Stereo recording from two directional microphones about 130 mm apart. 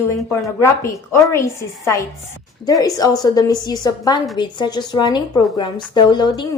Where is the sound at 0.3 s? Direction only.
20° left (ahead or behind).